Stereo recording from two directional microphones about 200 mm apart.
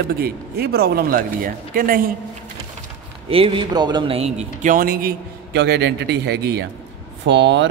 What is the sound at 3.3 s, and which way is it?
A man's voice, 25° right (ahead or behind).